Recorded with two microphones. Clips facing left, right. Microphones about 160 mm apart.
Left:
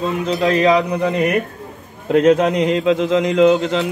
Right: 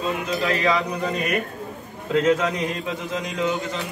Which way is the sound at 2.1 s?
70° left (ahead or behind).